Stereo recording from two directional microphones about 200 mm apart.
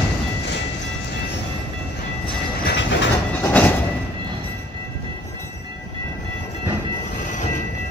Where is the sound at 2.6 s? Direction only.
65° left (ahead or behind).